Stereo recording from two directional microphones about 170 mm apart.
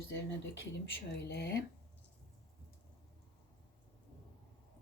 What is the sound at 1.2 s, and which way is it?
Speech, 80° left.